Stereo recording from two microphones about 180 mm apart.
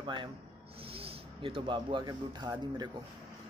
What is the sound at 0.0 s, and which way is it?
Speech, 25° right (ahead or behind).